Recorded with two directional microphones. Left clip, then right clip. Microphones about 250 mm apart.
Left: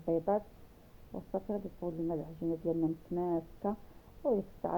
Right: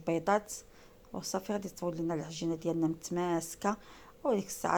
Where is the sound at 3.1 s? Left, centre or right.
Right.